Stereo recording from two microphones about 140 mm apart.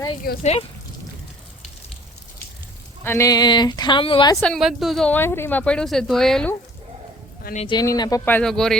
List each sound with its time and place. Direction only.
0.3 s speech: 90° left
3.0 s speech: 20° left (ahead or behind); by 4.4 s 35° left (ahead or behind)
4.4 s a woman's voice: centre (ahead or behind)
5.1 s speech: 15° left (ahead or behind)
7.5 s speech: 90° left
7.8 s speech: 30° left (ahead or behind)
8.2 s a woman's voice: 15° left (ahead or behind)